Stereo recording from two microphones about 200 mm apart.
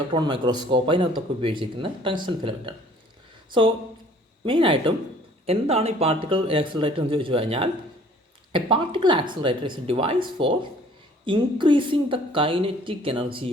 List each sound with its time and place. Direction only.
0.1 s speech: 25° right (ahead or behind)
4.4 s speech: 25° right (ahead or behind)